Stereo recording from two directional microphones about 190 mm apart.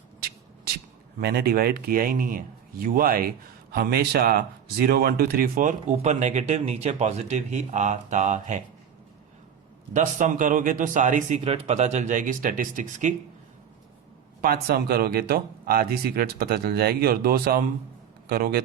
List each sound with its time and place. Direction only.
1.2 s a man's voice: 55° right (ahead or behind); by 8.6 s 40° right (ahead or behind)
9.9 s speech: 40° right (ahead or behind)
14.4 s a man's voice: 50° right (ahead or behind)